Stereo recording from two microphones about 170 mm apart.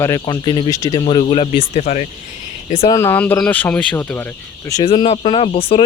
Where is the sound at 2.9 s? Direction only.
10° left (ahead or behind).